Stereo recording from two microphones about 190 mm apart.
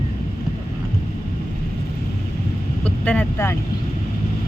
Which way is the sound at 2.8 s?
5° left (ahead or behind).